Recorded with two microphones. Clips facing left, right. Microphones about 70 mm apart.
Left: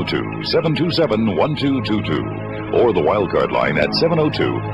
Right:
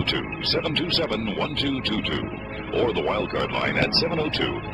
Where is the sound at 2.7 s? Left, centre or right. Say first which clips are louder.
Left 9 dB; left.